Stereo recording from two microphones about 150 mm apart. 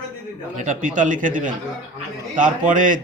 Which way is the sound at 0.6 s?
60° right (ahead or behind).